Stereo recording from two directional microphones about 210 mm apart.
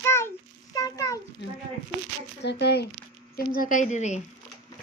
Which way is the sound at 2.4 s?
55° left (ahead or behind).